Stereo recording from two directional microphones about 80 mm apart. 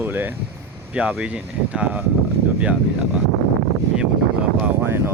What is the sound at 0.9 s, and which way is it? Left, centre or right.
Speech, centre.